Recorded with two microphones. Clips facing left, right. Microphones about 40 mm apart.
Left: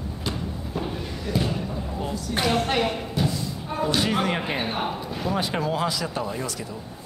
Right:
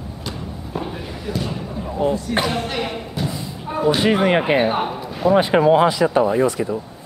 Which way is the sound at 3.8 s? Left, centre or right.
Right.